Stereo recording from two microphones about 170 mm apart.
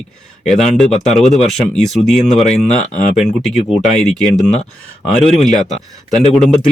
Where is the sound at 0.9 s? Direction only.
40° left (ahead or behind).